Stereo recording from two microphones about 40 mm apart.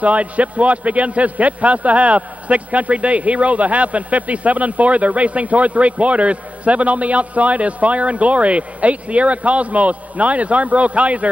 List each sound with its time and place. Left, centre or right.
0.0 s a man's voice: right